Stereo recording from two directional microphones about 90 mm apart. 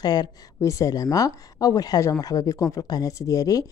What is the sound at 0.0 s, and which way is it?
Speech, 50° left (ahead or behind).